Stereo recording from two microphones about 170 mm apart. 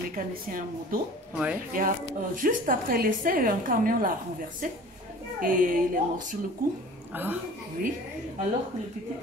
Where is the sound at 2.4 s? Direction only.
55° right (ahead or behind).